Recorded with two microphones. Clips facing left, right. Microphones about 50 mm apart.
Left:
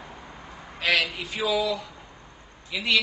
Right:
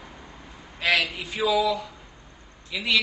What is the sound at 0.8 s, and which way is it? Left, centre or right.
A man's voice, centre.